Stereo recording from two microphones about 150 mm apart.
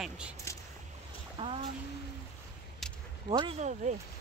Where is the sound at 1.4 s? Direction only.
35° right (ahead or behind).